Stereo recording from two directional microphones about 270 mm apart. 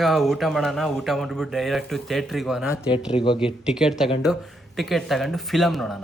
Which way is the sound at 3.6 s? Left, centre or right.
Centre.